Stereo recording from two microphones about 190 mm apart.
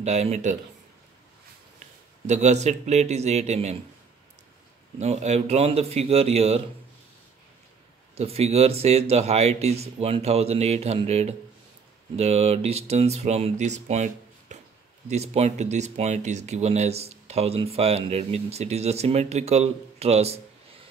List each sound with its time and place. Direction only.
0.0 s speech: 35° right (ahead or behind)
2.2 s speech: 35° right (ahead or behind)
4.9 s speech: 35° right (ahead or behind)
8.1 s speech: 35° right (ahead or behind)